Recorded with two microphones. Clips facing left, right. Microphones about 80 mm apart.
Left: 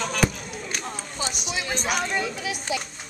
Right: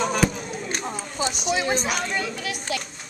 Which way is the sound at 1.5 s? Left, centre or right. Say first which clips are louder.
Right 8 dB; right.